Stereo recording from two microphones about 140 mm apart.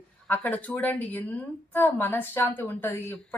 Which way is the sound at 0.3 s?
15° left (ahead or behind).